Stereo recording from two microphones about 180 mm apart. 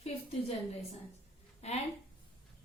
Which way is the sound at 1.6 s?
35° left (ahead or behind).